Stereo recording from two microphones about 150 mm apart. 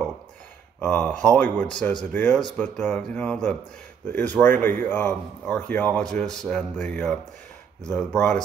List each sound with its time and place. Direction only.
0.7 s speech: 10° left (ahead or behind)